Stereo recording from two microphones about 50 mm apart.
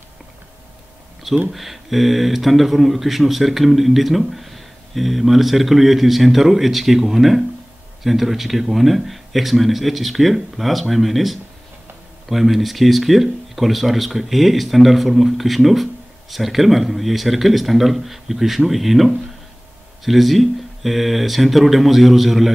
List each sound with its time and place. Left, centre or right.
1.5 s speech: centre